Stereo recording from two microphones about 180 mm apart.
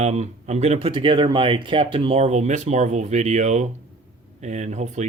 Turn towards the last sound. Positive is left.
turn(degrees=-40)  # may be behind; listen again after turning